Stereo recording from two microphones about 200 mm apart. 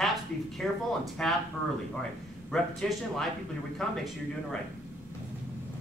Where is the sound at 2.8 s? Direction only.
5° left (ahead or behind).